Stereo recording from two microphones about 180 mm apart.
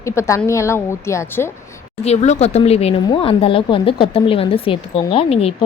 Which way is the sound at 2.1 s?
40° left (ahead or behind).